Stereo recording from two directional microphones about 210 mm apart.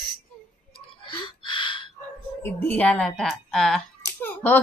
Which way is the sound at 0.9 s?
25° left (ahead or behind).